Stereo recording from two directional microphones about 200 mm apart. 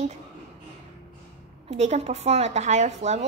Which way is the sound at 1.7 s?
35° right (ahead or behind).